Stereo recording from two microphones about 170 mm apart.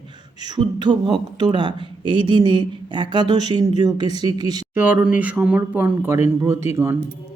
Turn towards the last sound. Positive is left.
turn(degrees=-15)  # may be behind; listen again after turning